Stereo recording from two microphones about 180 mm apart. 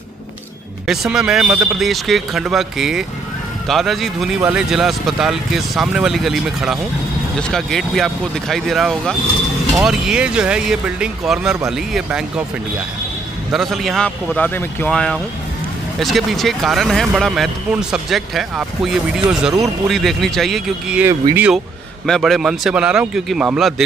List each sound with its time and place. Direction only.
0.8 s speech: centre (ahead or behind)
13.5 s speech: centre (ahead or behind)
21.1 s speech: 15° right (ahead or behind)
22.0 s speech: centre (ahead or behind)